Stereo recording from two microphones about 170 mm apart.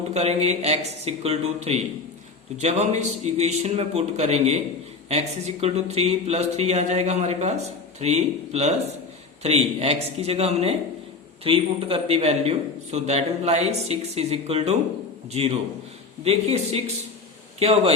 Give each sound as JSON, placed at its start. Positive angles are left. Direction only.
{"t": 0.1, "sound": "speech", "side_deg": -40}